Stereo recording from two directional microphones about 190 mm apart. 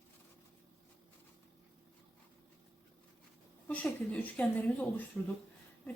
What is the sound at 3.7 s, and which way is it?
A woman's voice, 5° left (ahead or behind).